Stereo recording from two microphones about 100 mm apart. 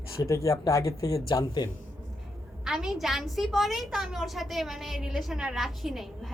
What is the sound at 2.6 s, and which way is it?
Speech, 5° right (ahead or behind).